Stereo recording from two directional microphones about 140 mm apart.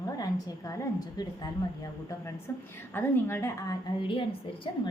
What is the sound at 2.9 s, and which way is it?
Speech, 15° left (ahead or behind).